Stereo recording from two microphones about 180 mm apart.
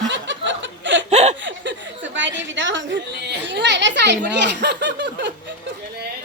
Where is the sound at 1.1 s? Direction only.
40° right (ahead or behind).